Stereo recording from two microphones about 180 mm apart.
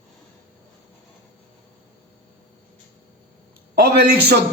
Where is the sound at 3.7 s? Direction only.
60° right (ahead or behind).